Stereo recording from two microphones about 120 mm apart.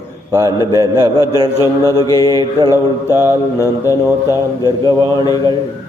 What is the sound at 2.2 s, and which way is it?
Mantra, 35° right (ahead or behind).